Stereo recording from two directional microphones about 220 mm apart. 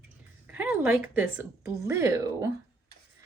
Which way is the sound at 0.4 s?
5° right (ahead or behind).